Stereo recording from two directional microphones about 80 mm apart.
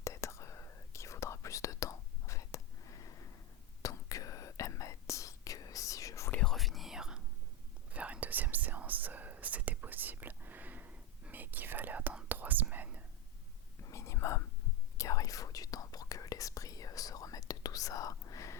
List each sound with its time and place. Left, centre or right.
0.0 s whispering: left
6.3 s whispering: centre
13.8 s whispering: left